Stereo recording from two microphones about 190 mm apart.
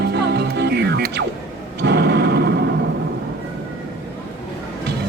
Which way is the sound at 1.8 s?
60° right (ahead or behind).